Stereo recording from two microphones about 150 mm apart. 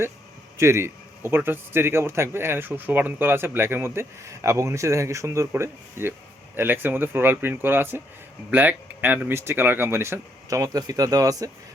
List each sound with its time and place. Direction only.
0.5 s a man's voice: 20° right (ahead or behind)